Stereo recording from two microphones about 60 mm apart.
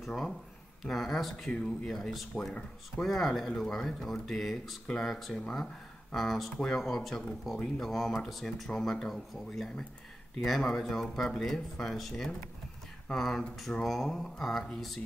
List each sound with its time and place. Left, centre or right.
0.0 s speech: centre
1.5 s speech: centre
1.9 s speech: centre